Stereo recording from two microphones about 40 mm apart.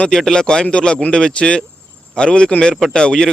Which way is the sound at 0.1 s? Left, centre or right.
Centre.